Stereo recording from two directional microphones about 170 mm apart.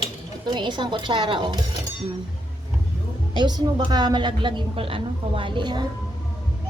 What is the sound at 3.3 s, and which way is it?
A woman's voice, 25° right (ahead or behind).